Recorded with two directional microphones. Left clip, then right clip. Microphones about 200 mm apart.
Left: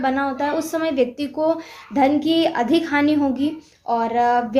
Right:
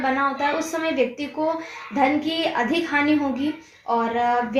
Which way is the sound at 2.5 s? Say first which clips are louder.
Left 3 dB; 35° left (ahead or behind).